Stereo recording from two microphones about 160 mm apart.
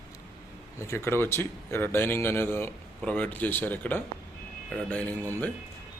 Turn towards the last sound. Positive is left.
turn(degrees=10)  # may be behind; listen again after turning